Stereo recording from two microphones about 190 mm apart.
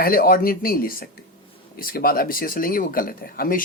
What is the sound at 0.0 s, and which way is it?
Speech, 50° left (ahead or behind).